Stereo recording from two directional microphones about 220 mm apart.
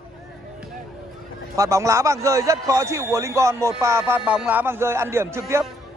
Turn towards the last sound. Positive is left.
turn(degrees=-10)  # may be behind; listen again after turning